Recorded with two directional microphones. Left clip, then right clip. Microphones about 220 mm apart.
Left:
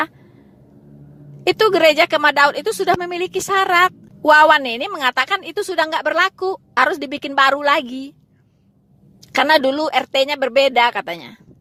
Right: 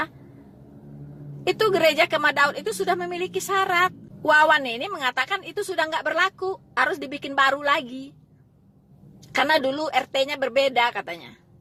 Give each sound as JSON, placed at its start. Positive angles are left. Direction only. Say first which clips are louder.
{"t": 1.5, "sound": "a woman's voice", "louder": "left 7 dB", "side_deg": 40}
{"t": 9.3, "sound": "a woman's voice", "louder": "left 6 dB", "side_deg": 45}